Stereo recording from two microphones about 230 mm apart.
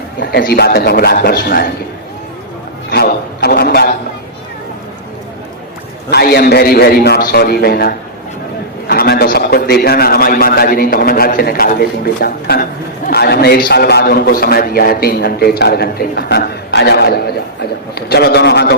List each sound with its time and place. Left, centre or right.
0.2 s a man's voice: left
2.9 s a man's voice: left
6.1 s a man's voice: left